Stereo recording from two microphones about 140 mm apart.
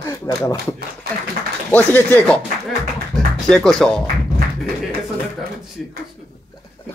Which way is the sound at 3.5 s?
5° left (ahead or behind).